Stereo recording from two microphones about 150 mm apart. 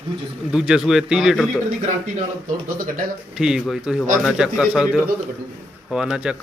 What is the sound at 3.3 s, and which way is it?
Speech, 5° right (ahead or behind).